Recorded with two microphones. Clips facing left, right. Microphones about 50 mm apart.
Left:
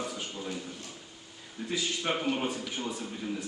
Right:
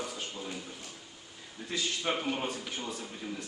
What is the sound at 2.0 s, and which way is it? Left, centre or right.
Speech, centre.